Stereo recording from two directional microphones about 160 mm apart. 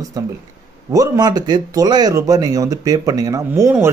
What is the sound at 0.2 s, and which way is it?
Speech, 25° right (ahead or behind).